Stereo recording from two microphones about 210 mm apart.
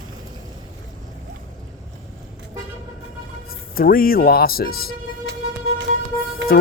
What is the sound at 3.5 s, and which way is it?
Speech, 45° left (ahead or behind).